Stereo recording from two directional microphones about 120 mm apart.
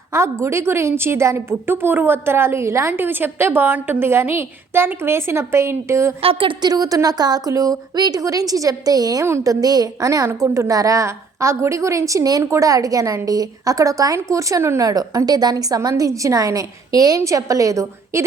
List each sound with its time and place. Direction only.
0.1 s a woman's voice: 25° right (ahead or behind)
6.6 s a woman's voice: 35° right (ahead or behind)